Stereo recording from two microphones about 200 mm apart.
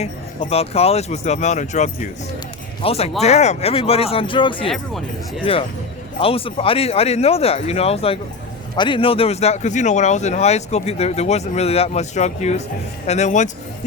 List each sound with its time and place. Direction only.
0.0 s speech: 30° left (ahead or behind)